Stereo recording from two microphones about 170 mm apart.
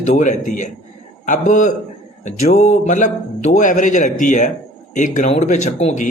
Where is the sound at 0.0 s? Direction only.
45° left (ahead or behind).